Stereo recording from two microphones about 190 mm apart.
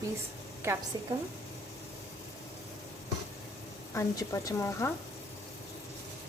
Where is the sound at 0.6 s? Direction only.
15° right (ahead or behind).